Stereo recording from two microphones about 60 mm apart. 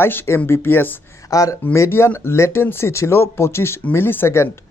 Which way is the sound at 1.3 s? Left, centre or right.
Left.